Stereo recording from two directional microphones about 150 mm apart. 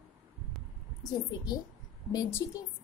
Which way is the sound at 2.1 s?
20° left (ahead or behind).